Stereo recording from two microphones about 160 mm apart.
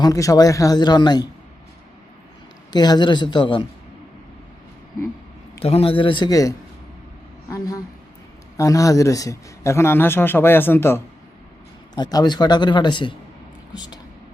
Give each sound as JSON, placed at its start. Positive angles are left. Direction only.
{"t": 0.0, "sound": "speech", "side_deg": 20}
{"t": 2.7, "sound": "speech", "side_deg": 25}
{"t": 5.6, "sound": "a man's voice", "side_deg": 35}
{"t": 8.5, "sound": "a man's voice", "side_deg": 20}
{"t": 11.9, "sound": "speech", "side_deg": 25}